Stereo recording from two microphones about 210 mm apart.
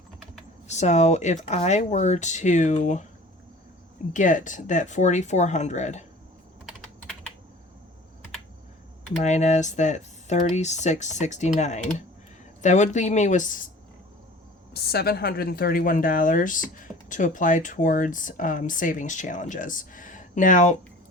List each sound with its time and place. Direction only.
0.7 s speech: 35° left (ahead or behind)
4.1 s speech: 40° left (ahead or behind)
6.7 s typing: centre (ahead or behind)
9.2 s speech: 35° left (ahead or behind)
14.7 s speech: 50° left (ahead or behind)